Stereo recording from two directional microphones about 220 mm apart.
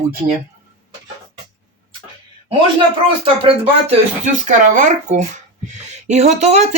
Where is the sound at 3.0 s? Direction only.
25° right (ahead or behind).